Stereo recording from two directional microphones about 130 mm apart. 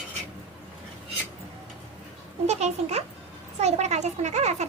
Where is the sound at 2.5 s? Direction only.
55° right (ahead or behind).